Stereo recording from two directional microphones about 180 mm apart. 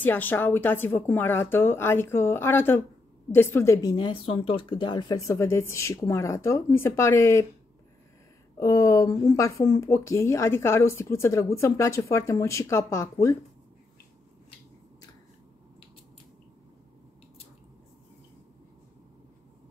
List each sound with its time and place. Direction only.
0.0 s speech: 10° left (ahead or behind)
8.5 s speech: 15° left (ahead or behind)